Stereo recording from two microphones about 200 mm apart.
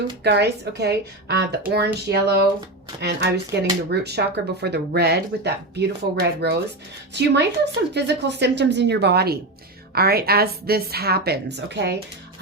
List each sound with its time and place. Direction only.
0.2 s a woman's voice: 55° right (ahead or behind)